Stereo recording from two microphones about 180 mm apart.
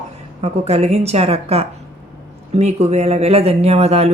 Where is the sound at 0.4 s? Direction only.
35° right (ahead or behind).